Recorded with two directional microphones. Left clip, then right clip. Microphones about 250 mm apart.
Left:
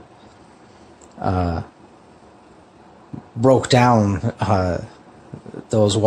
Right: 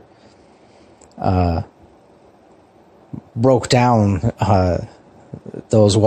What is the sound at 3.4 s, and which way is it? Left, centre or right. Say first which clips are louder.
Speech: even; centre.